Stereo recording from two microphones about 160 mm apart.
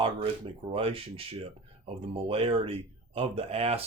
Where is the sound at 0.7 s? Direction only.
35° right (ahead or behind).